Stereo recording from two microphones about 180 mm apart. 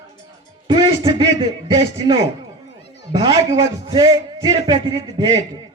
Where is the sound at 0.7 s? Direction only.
25° right (ahead or behind).